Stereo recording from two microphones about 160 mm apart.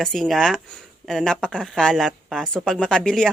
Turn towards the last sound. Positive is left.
turn(degrees=5)  # may be behind; listen again after turning